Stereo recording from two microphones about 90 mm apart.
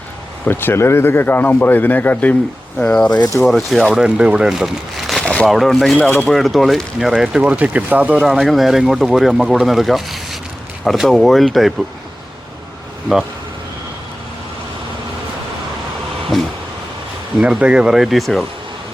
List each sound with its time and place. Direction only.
0.4 s a man's voice: 25° left (ahead or behind)
3.4 s speech: centre (ahead or behind)
5.2 s a sound: 15° left (ahead or behind)
5.5 s speech: centre (ahead or behind)
6.0 s speech: 20° left (ahead or behind)
6.2 s speech: centre (ahead or behind); by 8.2 s 15° right (ahead or behind)
8.4 s speech: centre (ahead or behind)
17.4 s speech: 10° right (ahead or behind)